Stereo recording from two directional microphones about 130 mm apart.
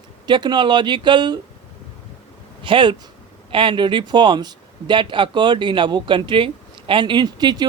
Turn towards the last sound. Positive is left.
turn(degrees=-30)  # may be behind; listen again after turning